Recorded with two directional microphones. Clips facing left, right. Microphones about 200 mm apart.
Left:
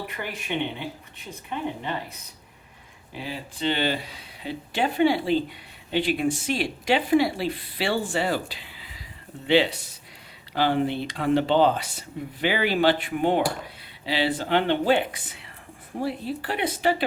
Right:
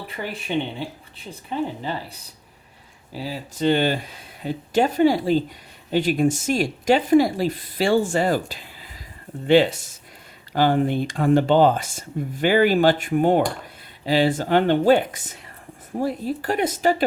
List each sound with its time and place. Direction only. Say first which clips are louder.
0.3 s speech: right 4 dB; 30° right (ahead or behind)
3.1 s speech: right 4 dB; 35° right (ahead or behind)